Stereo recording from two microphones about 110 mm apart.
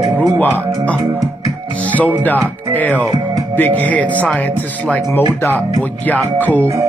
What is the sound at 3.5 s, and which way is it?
A man's voice, 15° left (ahead or behind).